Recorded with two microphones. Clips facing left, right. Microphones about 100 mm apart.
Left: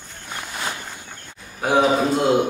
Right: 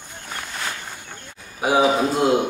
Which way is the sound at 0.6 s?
15° left (ahead or behind).